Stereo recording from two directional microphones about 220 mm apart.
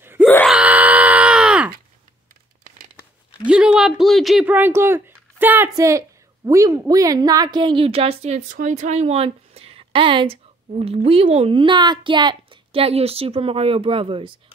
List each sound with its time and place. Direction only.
0.0 s wail: 10° right (ahead or behind)
0.3 s wail: 5° left (ahead or behind)
0.6 s a sound: 5° right (ahead or behind)
3.4 s a woman's voice: 5° right (ahead or behind); by 14.3 s 25° right (ahead or behind)